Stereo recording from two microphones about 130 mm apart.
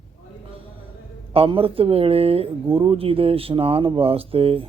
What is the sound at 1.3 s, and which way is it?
Speech, 45° right (ahead or behind).